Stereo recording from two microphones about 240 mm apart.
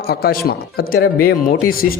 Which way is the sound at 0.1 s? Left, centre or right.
Left.